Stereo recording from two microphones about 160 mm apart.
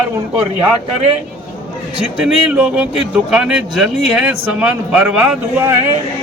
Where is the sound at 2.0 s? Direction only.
5° right (ahead or behind).